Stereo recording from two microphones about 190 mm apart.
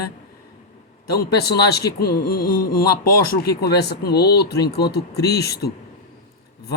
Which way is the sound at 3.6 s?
60° left (ahead or behind).